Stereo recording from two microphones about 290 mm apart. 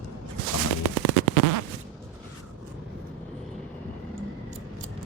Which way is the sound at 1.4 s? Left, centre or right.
Right.